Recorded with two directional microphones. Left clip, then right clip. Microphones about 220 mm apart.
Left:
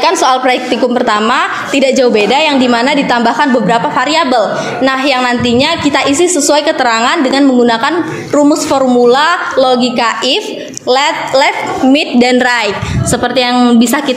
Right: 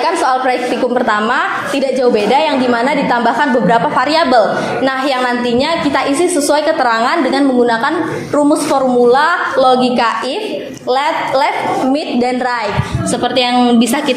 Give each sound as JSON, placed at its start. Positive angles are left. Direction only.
{"t": 0.0, "sound": "a woman's voice", "side_deg": 45}
{"t": 2.1, "sound": "a woman's voice", "side_deg": 30}
{"t": 10.9, "sound": "a woman's voice", "side_deg": 35}
{"t": 13.4, "sound": "a woman's voice", "side_deg": 25}